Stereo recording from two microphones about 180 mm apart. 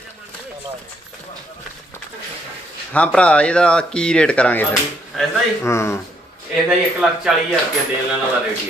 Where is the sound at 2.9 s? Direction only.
5° left (ahead or behind).